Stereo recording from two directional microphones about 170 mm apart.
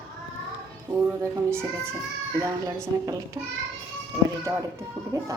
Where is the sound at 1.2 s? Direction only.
15° right (ahead or behind).